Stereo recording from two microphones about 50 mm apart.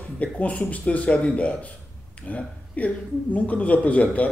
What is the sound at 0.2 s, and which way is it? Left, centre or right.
A man's voice, left.